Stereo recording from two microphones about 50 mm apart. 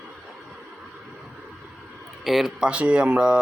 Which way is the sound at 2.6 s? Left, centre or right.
Right.